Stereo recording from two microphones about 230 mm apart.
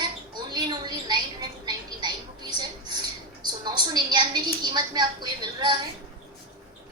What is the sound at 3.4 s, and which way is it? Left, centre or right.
A woman's voice, centre.